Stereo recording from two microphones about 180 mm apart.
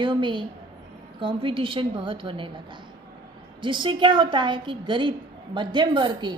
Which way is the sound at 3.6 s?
25° right (ahead or behind).